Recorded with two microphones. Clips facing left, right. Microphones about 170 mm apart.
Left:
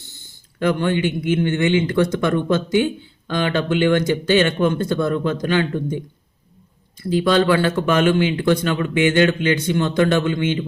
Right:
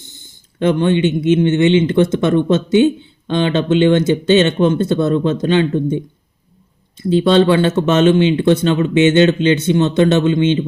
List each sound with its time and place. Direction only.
0.6 s a man's voice: 20° right (ahead or behind)